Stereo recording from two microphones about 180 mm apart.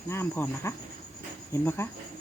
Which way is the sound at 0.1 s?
15° left (ahead or behind).